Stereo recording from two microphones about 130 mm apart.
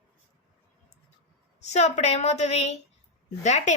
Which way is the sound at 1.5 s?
60° left (ahead or behind).